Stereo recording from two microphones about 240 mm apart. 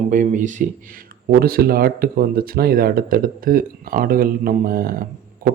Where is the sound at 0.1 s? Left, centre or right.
Right.